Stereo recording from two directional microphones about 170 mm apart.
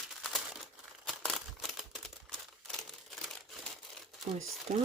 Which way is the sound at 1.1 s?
Centre (ahead or behind).